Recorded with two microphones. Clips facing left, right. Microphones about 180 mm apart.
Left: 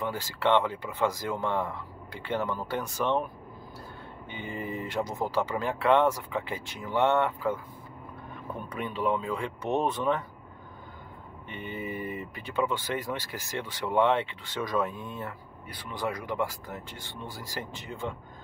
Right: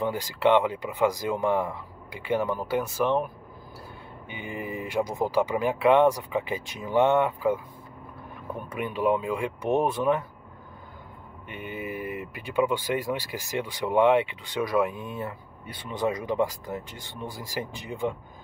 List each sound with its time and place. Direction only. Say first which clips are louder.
0.0 s speech: right 5 dB; 15° right (ahead or behind)
4.3 s speech: right 1 dB; 10° right (ahead or behind)
8.6 s speech: right 4 dB; 10° right (ahead or behind)
11.4 s speech: right 1 dB; 10° right (ahead or behind)
15.6 s speech: right 5 dB; 25° right (ahead or behind)